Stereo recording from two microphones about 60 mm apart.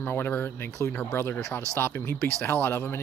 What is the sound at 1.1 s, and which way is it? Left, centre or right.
Speech, left.